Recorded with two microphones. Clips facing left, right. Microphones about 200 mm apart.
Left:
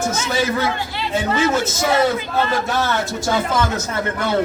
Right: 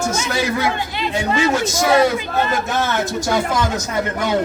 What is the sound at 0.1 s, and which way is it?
A man's voice, 15° right (ahead or behind).